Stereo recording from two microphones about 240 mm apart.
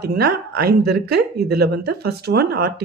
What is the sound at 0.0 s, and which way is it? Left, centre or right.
Speech, right.